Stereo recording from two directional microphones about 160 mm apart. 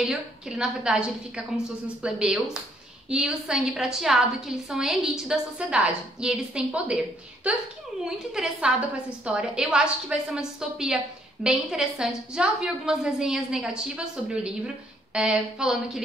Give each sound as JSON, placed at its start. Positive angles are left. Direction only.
{"t": 0.0, "sound": "a woman's voice", "side_deg": -5}
{"t": 8.0, "sound": "a woman's voice", "side_deg": -5}